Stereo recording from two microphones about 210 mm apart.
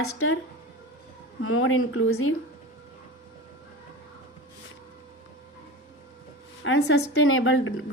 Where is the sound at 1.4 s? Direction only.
70° left (ahead or behind).